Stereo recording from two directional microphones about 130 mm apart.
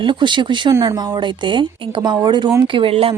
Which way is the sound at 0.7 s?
20° right (ahead or behind).